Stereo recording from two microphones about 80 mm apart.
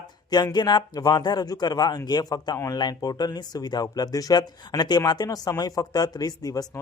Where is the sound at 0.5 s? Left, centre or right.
Left.